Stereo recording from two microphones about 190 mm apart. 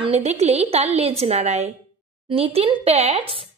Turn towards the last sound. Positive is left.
turn(degrees=-30)  # may be behind; listen again after turning